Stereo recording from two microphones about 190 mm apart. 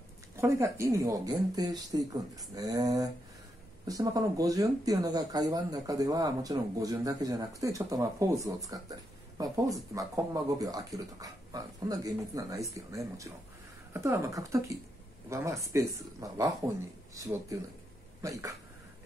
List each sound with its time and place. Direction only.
0.4 s speech: 15° right (ahead or behind)